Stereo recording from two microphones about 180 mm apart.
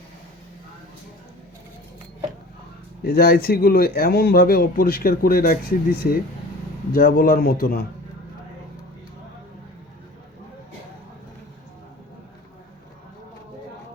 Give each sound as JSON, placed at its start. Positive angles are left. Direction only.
{"t": 3.0, "sound": "speech", "side_deg": 60}